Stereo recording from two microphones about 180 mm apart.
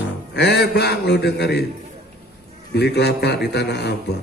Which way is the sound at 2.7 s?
65° left (ahead or behind).